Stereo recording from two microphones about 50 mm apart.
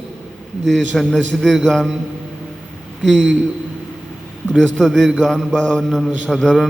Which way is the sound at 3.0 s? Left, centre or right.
Centre.